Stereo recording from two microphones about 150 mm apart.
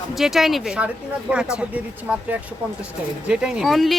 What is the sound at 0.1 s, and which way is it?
Speech, centre (ahead or behind).